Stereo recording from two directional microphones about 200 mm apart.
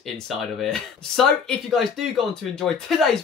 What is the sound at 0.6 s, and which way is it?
Speech, centre (ahead or behind).